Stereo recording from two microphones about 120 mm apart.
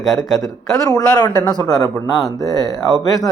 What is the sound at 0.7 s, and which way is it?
Speech, 30° left (ahead or behind).